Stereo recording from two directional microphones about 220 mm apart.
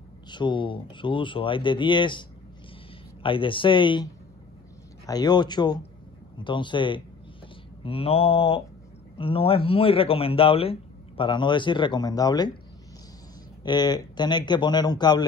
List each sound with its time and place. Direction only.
0.3 s speech: 20° left (ahead or behind)
13.7 s speech: 20° left (ahead or behind)